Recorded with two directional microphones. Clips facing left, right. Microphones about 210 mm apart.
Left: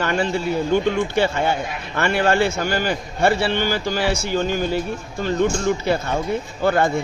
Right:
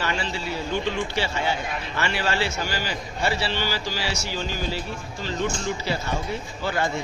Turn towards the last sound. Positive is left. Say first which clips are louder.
# left 7 dB
turn(degrees=55)  # may be behind; listen again after turning